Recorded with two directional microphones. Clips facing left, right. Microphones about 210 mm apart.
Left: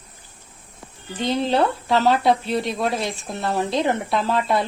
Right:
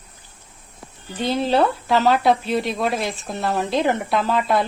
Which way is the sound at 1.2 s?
5° right (ahead or behind).